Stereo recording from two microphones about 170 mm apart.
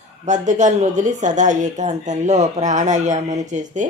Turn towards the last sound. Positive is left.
turn(degrees=-45)  # may be behind; listen again after turning